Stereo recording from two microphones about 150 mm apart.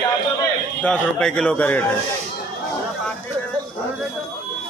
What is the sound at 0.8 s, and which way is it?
A man's voice, 5° left (ahead or behind).